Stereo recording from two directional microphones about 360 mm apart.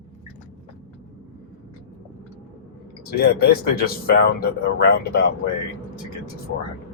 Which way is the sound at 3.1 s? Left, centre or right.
Left.